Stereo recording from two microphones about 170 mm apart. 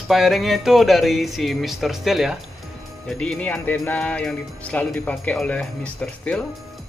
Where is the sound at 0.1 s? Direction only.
Centre (ahead or behind).